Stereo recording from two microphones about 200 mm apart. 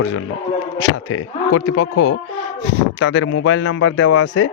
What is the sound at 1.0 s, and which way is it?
A man's voice, 90° left.